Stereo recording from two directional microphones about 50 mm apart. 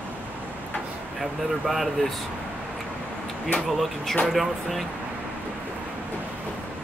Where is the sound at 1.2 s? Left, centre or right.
Centre.